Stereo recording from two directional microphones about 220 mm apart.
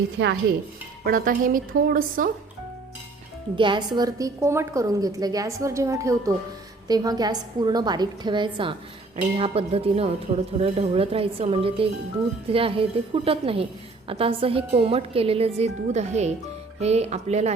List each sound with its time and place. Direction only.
1.0 s speech: 40° right (ahead or behind)
3.5 s a woman's voice: 20° right (ahead or behind)